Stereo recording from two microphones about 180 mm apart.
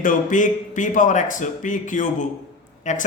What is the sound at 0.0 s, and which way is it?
Speech, 45° left (ahead or behind).